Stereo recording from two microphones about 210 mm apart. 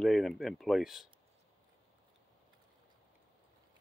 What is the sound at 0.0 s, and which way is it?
Speech, centre (ahead or behind).